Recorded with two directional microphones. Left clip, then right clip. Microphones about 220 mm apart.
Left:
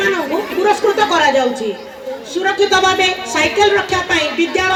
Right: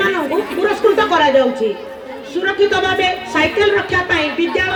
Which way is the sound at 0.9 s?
35° left (ahead or behind).